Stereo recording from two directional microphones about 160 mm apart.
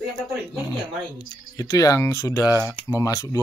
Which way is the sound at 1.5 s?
20° left (ahead or behind).